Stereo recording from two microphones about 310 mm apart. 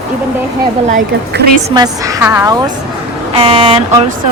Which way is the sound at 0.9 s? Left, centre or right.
Right.